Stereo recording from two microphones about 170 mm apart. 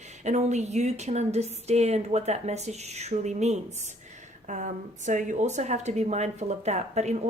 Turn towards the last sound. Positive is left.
turn(degrees=-40)  # may be behind; listen again after turning